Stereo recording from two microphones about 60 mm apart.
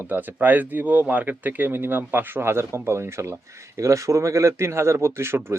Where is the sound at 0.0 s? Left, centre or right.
Right.